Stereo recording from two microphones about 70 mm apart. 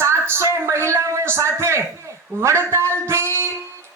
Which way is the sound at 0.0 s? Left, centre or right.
Right.